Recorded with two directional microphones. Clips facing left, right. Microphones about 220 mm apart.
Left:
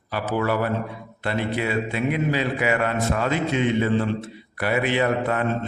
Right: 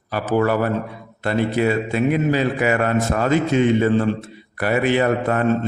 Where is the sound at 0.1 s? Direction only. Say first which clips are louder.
Right 5 dB; 45° right (ahead or behind).